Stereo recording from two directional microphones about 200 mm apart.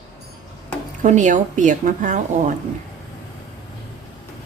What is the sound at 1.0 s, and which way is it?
Speech, 40° right (ahead or behind).